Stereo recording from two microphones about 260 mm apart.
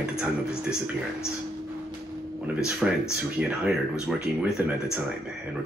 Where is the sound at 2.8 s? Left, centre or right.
Centre.